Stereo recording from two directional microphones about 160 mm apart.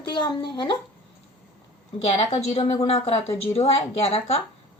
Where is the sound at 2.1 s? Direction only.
45° left (ahead or behind).